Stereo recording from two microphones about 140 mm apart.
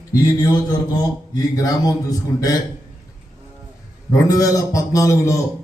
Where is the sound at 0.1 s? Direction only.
25° left (ahead or behind).